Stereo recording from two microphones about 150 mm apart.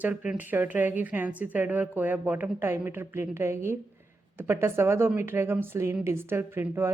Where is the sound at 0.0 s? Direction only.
10° right (ahead or behind).